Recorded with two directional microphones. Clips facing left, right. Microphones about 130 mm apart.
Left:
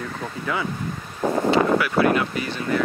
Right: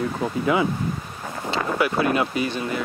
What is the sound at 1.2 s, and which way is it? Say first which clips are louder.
Wind: left 11 dB; 55° left (ahead or behind).